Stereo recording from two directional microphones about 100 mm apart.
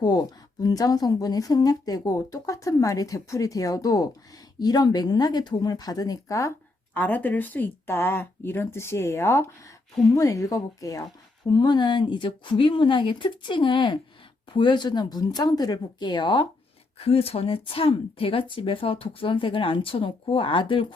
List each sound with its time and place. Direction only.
0.0 s speech: 45° left (ahead or behind)
6.9 s speech: 15° left (ahead or behind)
9.9 s speech: 5° left (ahead or behind)
10.2 s speech: 35° left (ahead or behind); by 16.5 s 55° left (ahead or behind)
17.0 s speech: 75° left (ahead or behind); by 20.8 s 60° left (ahead or behind)